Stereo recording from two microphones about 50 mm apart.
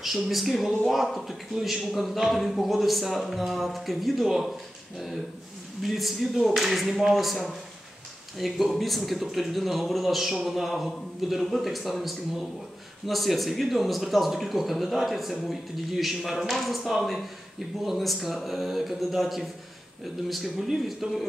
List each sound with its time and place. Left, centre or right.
0.0 s a man's voice: centre
5.8 s a man's voice: centre